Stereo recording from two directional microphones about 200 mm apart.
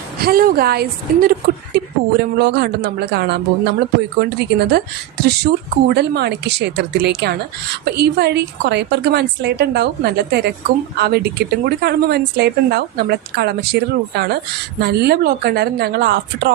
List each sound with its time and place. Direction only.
0.2 s speech: 50° right (ahead or behind)